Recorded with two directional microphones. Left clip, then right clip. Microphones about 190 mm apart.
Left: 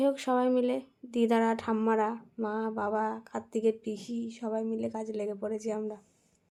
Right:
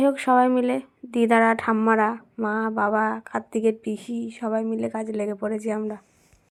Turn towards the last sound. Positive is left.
turn(degrees=-15)  # may be behind; listen again after turning